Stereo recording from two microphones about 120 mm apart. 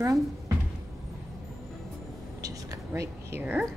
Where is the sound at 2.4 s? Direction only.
30° right (ahead or behind).